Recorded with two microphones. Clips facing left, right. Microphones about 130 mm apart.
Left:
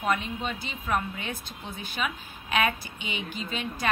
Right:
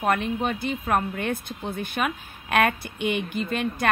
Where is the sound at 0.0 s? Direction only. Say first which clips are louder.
Right 5 dB; 55° right (ahead or behind).